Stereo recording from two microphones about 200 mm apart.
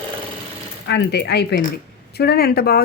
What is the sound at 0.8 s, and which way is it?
A woman's voice, 60° left (ahead or behind).